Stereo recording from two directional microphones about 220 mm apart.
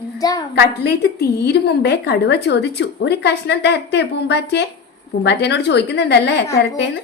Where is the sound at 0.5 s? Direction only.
50° left (ahead or behind).